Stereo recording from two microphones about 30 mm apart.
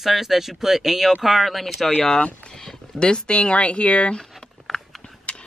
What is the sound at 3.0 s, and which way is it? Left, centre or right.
Speech, left.